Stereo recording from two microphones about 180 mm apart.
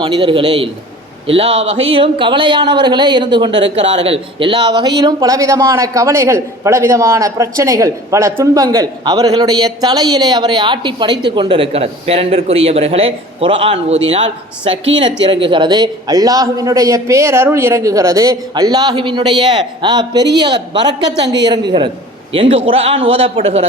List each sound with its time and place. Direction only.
0.0 s speech: 25° right (ahead or behind)